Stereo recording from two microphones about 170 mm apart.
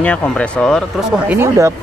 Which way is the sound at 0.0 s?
10° left (ahead or behind).